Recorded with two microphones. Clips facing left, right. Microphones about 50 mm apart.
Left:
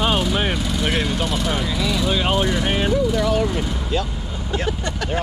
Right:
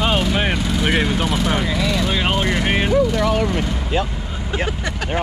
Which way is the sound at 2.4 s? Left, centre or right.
Right.